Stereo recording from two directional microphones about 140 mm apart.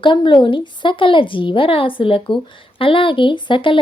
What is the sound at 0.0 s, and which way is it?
Speech, 35° left (ahead or behind).